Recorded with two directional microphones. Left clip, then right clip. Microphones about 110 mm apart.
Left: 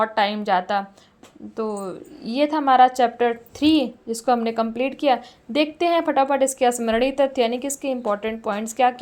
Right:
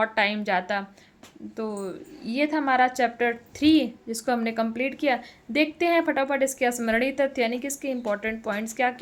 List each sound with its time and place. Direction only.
0.0 s a woman's voice: 25° left (ahead or behind)